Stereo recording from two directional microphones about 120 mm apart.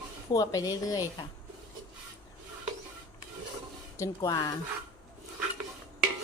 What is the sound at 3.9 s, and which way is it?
Speech, 30° left (ahead or behind).